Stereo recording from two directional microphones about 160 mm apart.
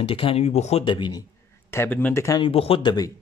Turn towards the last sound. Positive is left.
turn(degrees=25)  # may be behind; listen again after turning